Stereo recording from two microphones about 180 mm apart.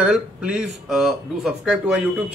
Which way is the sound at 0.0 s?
5° right (ahead or behind).